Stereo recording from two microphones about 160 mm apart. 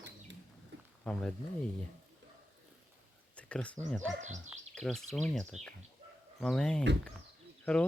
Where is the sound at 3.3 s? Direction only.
10° left (ahead or behind).